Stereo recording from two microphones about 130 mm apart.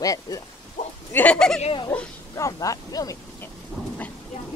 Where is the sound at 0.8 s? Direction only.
70° left (ahead or behind).